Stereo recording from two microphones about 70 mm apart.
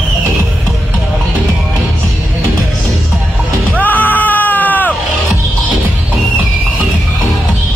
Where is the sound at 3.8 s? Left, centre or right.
Left.